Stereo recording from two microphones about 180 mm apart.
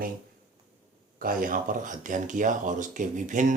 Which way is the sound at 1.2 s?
50° right (ahead or behind).